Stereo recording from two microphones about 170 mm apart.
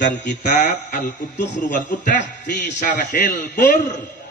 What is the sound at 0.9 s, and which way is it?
A man's voice, 50° left (ahead or behind).